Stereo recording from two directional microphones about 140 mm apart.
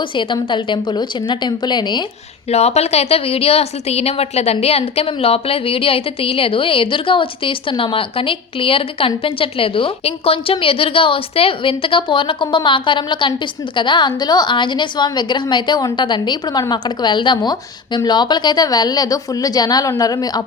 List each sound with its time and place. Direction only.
0.0 s a woman's voice: 35° left (ahead or behind)
2.5 s a woman's voice: 50° left (ahead or behind); by 20.4 s 25° left (ahead or behind)